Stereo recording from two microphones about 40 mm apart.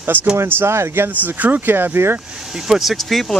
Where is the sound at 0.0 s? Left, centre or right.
Right.